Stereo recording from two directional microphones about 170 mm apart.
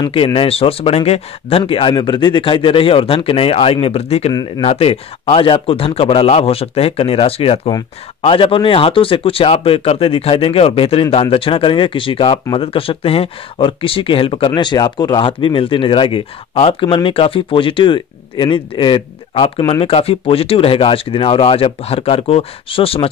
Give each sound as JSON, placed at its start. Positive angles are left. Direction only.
{"t": 0.0, "sound": "speech", "side_deg": 30}
{"t": 4.3, "sound": "speech", "side_deg": 20}
{"t": 4.6, "sound": "speech", "side_deg": 35}